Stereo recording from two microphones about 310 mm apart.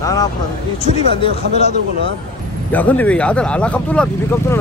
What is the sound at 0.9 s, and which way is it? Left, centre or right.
Speech, centre.